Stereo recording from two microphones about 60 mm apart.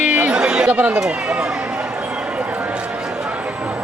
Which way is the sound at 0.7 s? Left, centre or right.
Right.